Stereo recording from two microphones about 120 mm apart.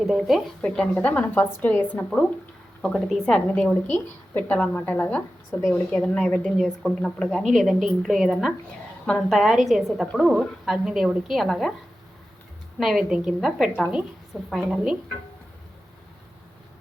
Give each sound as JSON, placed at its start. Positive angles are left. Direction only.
{"t": 0.0, "sound": "a woman's voice", "side_deg": 0}
{"t": 2.8, "sound": "a woman's voice", "side_deg": 5}
{"t": 12.8, "sound": "a woman's voice", "side_deg": -5}